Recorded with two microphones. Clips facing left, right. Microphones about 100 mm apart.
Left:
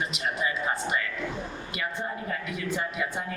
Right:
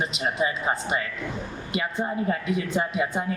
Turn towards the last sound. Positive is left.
turn(degrees=-25)  # may be behind; listen again after turning